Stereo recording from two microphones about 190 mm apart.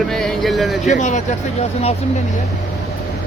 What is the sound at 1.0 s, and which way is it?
Speech, 40° left (ahead or behind).